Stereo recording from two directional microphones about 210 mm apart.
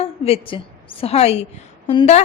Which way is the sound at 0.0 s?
25° left (ahead or behind).